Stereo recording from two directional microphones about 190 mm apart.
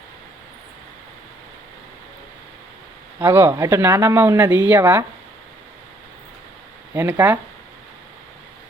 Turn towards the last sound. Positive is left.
turn(degrees=-15)  # may be behind; listen again after turning